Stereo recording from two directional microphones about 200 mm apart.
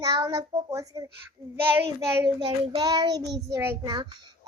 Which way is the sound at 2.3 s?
25° right (ahead or behind).